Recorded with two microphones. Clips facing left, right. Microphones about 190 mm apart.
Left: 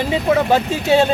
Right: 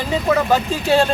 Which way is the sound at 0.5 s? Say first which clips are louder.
Left 1 dB; 20° left (ahead or behind).